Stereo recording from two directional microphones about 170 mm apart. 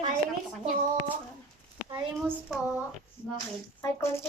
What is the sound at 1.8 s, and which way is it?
Speech, 25° right (ahead or behind).